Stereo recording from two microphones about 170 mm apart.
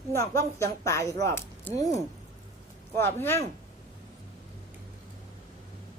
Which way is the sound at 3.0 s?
15° left (ahead or behind).